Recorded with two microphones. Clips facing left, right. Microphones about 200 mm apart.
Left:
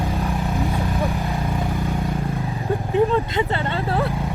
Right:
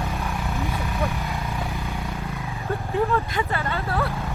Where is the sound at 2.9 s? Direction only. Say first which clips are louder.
Left 5 dB; 20° left (ahead or behind).